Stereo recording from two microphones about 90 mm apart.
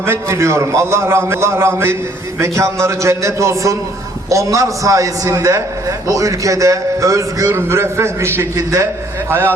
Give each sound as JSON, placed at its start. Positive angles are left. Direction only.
{"t": 0.0, "sound": "a man's voice", "side_deg": -30}
{"t": 8.5, "sound": "a man's voice", "side_deg": -40}